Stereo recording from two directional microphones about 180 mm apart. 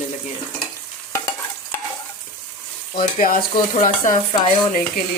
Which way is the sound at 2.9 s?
50° left (ahead or behind).